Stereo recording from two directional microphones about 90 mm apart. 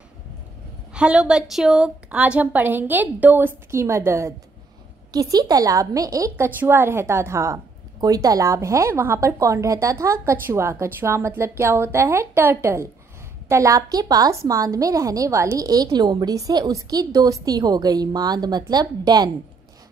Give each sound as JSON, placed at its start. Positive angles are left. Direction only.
{"t": 0.9, "sound": "a woman's voice", "side_deg": -10}
{"t": 5.1, "sound": "speech", "side_deg": -45}
{"t": 8.0, "sound": "a woman's voice", "side_deg": -45}